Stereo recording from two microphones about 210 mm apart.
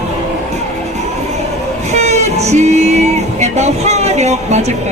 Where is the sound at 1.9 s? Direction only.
30° right (ahead or behind).